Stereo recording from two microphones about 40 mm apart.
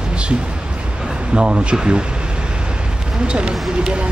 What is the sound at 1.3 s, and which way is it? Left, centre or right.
Speech, right.